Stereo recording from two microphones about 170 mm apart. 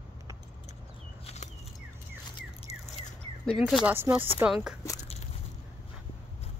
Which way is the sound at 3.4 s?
Centre (ahead or behind).